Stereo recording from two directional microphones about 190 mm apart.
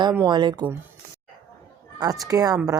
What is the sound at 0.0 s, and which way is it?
Speech, 20° right (ahead or behind).